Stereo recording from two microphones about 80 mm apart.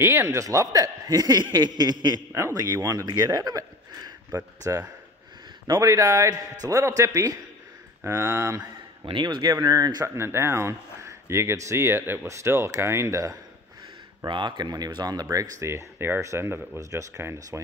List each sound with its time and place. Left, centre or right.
0.0 s a man's voice: right
0.4 s a man's voice: right
2.3 s speech: right
4.3 s speech: right
5.8 s speech: right
8.5 s speech: right
10.0 s speech: right
14.2 s speech: right
15.2 s speech: right